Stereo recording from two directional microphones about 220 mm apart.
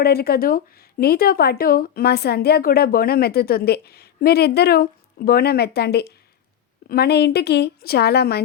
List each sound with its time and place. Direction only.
0.0 s speech: 45° left (ahead or behind)